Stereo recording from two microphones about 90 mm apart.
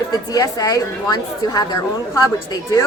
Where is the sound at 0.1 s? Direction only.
40° left (ahead or behind).